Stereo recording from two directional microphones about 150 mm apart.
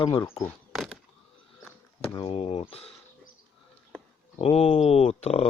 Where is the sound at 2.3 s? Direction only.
40° left (ahead or behind).